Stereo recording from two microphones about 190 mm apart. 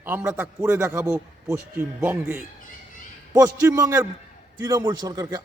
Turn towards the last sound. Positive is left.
turn(degrees=-20)  # may be behind; listen again after turning